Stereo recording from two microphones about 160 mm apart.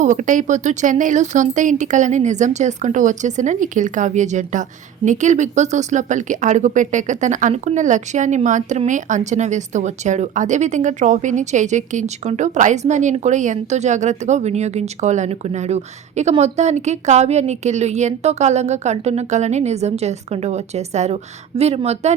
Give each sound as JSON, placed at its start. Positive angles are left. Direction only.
{"t": 0.0, "sound": "speech", "side_deg": -50}